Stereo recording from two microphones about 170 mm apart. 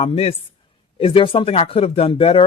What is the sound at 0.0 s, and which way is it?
Speech, 35° left (ahead or behind).